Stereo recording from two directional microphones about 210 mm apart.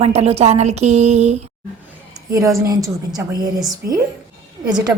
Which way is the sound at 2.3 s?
15° right (ahead or behind).